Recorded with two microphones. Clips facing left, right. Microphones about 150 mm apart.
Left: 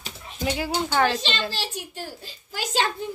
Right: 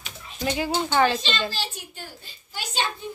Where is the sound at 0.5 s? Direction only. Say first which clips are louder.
Right 1 dB; 5° left (ahead or behind).